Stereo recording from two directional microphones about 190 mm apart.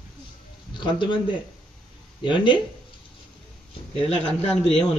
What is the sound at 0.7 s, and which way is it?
Speech, 25° left (ahead or behind).